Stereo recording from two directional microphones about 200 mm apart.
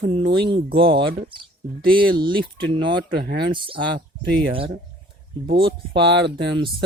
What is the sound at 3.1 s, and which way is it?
Speech, 55° right (ahead or behind).